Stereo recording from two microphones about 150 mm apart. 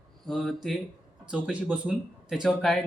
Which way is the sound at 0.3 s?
Centre (ahead or behind).